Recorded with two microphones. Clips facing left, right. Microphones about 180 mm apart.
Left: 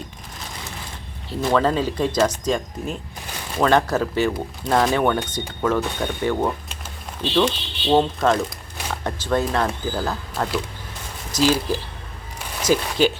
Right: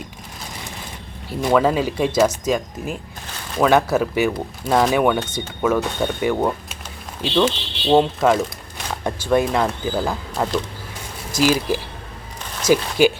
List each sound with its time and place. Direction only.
1.3 s speech: 10° right (ahead or behind)
5.2 s speech: 10° left (ahead or behind)
5.6 s speech: 10° right (ahead or behind)